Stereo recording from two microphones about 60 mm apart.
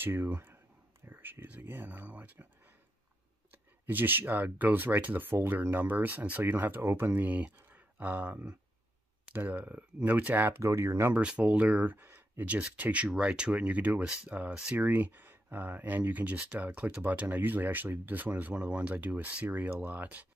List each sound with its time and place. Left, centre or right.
0.0 s speech: right
1.9 s speech: right
3.8 s speech: right
10.6 s speech: right
11.1 s speech: centre; by 12.4 s right
12.4 s speech: right